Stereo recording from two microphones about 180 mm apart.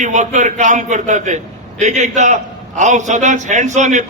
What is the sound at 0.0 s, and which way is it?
A man's voice, 40° right (ahead or behind).